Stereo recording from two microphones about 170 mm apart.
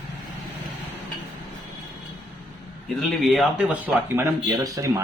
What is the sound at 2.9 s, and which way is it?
Speech, centre (ahead or behind).